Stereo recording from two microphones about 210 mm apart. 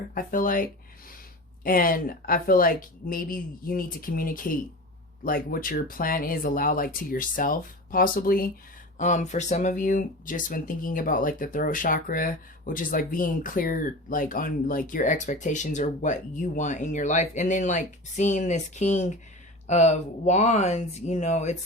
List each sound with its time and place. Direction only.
0.1 s speech: 40° left (ahead or behind)
1.6 s speech: 45° left (ahead or behind)